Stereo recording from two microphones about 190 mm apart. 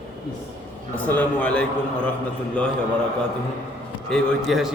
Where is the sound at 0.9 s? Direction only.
10° left (ahead or behind).